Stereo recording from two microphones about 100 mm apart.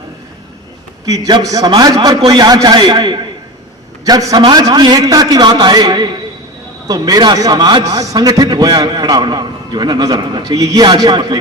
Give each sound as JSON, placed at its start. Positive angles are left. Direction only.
{"t": 1.0, "sound": "a man's voice", "side_deg": -35}